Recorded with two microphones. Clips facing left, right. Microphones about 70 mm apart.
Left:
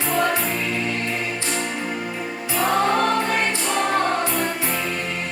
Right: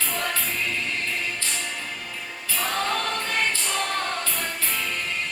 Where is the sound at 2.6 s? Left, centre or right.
Left.